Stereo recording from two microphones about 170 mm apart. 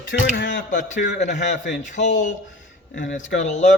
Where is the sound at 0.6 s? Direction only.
50° left (ahead or behind).